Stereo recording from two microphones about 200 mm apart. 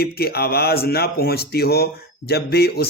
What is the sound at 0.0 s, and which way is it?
Speech, 50° left (ahead or behind).